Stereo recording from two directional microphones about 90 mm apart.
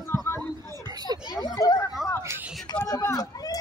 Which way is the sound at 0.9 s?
50° right (ahead or behind).